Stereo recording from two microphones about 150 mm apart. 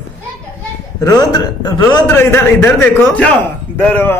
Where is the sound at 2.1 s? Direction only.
15° left (ahead or behind).